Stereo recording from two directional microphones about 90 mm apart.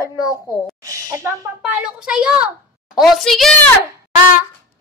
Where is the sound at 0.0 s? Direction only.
40° left (ahead or behind).